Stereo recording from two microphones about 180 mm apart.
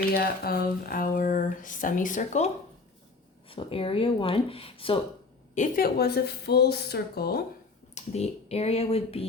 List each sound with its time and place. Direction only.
0.1 s speech: 55° left (ahead or behind)
3.5 s speech: 30° left (ahead or behind)
5.5 s speech: 55° left (ahead or behind)
7.9 s speech: 35° left (ahead or behind)